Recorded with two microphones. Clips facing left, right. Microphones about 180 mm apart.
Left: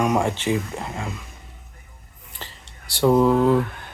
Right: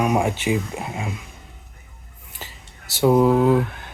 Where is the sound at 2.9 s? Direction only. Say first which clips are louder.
Right 1 dB; 5° right (ahead or behind).